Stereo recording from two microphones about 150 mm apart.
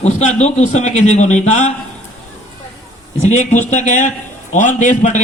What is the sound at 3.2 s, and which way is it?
A man's voice, 50° left (ahead or behind).